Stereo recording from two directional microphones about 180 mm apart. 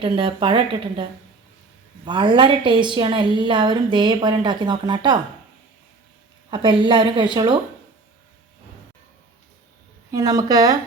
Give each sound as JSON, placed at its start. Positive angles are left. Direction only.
{"t": 0.0, "sound": "a woman's voice", "side_deg": -30}
{"t": 2.0, "sound": "a woman's voice", "side_deg": -25}
{"t": 6.5, "sound": "a woman's voice", "side_deg": -25}
{"t": 10.1, "sound": "a woman's voice", "side_deg": -20}